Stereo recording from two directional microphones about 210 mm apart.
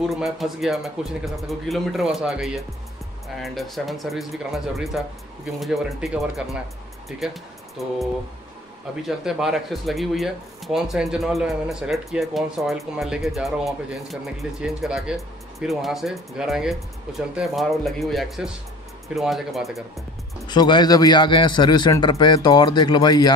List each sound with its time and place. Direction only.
0.0 s speech: centre (ahead or behind)
9.0 s speech: centre (ahead or behind)
20.4 s a man's voice: 20° left (ahead or behind)